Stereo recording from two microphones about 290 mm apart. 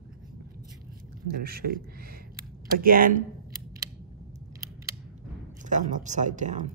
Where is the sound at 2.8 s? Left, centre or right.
Right.